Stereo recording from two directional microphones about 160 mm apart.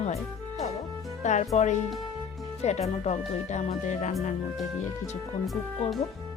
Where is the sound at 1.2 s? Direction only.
45° left (ahead or behind).